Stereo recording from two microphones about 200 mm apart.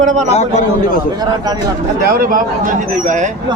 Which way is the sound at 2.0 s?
45° right (ahead or behind).